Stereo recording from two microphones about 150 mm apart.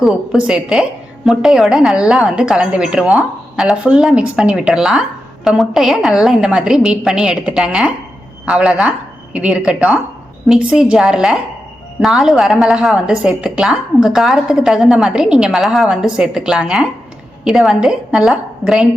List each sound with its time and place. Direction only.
0.0 s a woman's voice: 5° right (ahead or behind)